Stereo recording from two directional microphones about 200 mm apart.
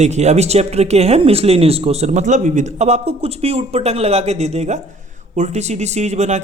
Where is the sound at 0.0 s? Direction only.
35° right (ahead or behind).